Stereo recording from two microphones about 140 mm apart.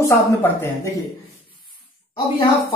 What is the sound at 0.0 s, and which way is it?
Speech, 20° left (ahead or behind).